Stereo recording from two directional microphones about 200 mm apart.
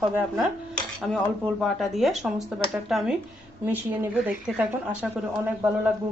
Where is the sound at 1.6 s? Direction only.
Centre (ahead or behind).